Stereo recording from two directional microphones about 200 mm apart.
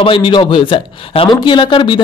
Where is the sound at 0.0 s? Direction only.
25° left (ahead or behind).